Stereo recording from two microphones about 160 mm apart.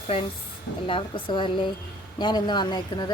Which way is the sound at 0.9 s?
30° left (ahead or behind).